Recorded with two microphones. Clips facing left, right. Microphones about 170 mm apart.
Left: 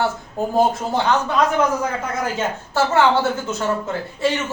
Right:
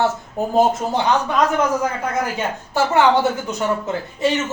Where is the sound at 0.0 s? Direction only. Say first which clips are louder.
Right 2 dB; 20° right (ahead or behind).